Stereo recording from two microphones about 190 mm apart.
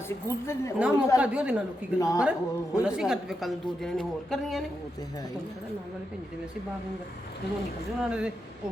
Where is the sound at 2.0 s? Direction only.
15° left (ahead or behind).